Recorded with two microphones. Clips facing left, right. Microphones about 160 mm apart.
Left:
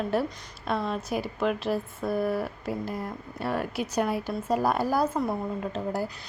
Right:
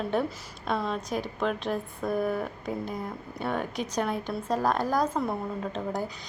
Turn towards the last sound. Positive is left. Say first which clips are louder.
# left 1 dB
turn(degrees=5)  # may be behind; listen again after turning